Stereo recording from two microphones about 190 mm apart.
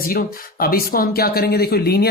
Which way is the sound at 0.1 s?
50° left (ahead or behind).